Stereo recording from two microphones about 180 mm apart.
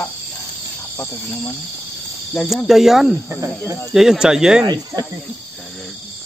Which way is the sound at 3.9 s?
5° right (ahead or behind).